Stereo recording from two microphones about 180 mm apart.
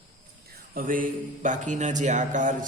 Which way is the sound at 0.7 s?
50° right (ahead or behind).